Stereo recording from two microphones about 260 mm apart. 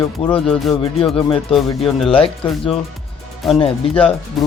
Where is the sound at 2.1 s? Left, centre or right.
Left.